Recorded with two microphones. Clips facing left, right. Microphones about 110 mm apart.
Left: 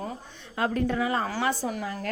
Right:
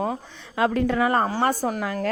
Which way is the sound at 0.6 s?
90° right.